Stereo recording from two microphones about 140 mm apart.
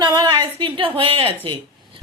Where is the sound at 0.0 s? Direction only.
30° right (ahead or behind).